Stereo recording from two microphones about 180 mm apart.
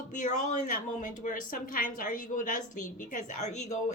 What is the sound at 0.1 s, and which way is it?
A woman's voice, 45° left (ahead or behind).